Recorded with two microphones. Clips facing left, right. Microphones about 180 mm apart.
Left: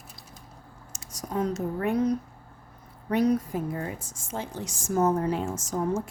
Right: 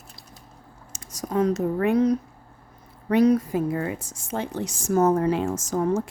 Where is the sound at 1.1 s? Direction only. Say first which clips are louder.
Right 6 dB; 90° right.